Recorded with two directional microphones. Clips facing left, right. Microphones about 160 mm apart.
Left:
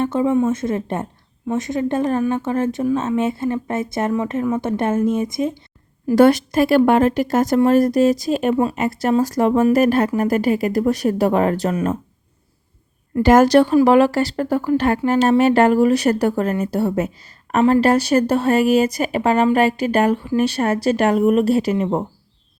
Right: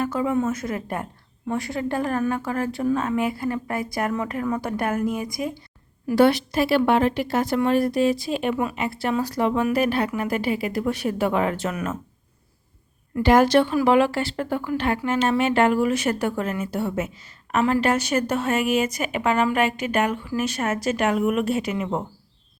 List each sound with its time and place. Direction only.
0.0 s speech: 25° left (ahead or behind)
6.1 s speech: 45° left (ahead or behind)
13.1 s speech: 45° left (ahead or behind)